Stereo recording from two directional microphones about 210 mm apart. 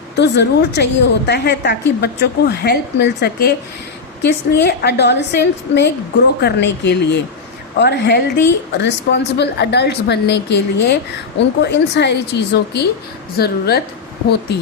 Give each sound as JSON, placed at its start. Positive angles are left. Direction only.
{"t": 0.2, "sound": "a woman's voice", "side_deg": 55}